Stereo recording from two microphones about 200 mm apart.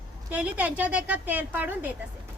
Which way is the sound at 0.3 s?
5° right (ahead or behind).